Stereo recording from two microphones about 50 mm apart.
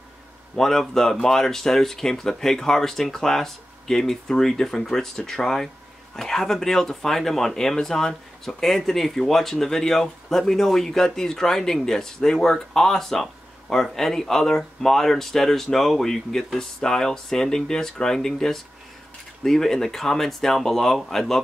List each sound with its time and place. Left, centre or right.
0.6 s speech: centre